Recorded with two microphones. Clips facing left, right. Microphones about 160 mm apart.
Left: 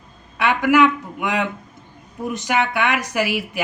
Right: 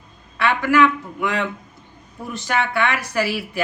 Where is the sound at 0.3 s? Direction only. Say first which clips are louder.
Left 1 dB; 15° left (ahead or behind).